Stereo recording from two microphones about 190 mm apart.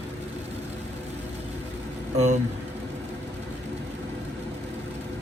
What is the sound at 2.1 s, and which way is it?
Speech, 35° right (ahead or behind).